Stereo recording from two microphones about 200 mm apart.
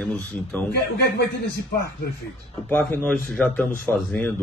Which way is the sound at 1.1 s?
55° left (ahead or behind).